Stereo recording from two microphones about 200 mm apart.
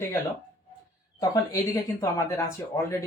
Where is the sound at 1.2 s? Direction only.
15° left (ahead or behind).